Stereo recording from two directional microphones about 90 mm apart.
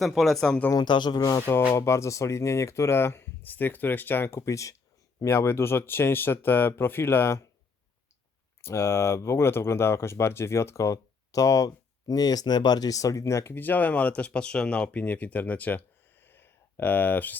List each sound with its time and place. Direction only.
0.0 s speech: centre (ahead or behind)
0.7 s speech: 55° left (ahead or behind)
1.4 s speech: 25° left (ahead or behind)
8.6 s speech: 30° left (ahead or behind)